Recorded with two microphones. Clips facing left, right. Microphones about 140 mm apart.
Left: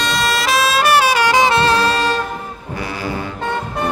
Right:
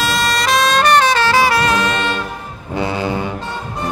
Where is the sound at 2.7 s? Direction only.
25° right (ahead or behind).